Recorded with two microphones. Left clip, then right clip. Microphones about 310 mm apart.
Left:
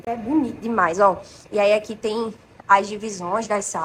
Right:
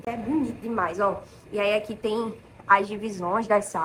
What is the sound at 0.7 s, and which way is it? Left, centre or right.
Speech, left.